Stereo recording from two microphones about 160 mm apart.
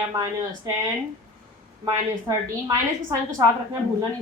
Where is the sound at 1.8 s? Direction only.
20° right (ahead or behind).